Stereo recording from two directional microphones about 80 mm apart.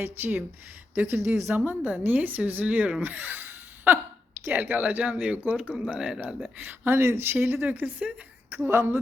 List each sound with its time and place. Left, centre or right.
0.0 s speech: right
4.4 s speech: right